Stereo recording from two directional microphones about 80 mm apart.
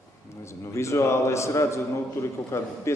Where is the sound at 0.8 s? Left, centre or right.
Left.